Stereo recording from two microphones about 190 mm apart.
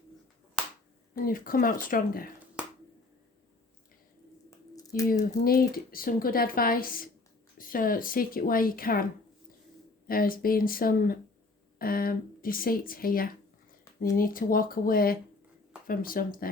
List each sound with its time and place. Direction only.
1.1 s speech: 50° left (ahead or behind)
4.7 s a sound: 20° left (ahead or behind)
5.0 s speech: 45° left (ahead or behind)
10.1 s speech: 50° left (ahead or behind)